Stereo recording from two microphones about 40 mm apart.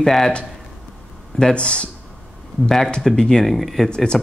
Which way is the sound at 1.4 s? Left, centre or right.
Left.